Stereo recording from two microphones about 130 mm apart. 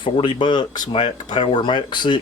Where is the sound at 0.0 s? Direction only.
40° left (ahead or behind).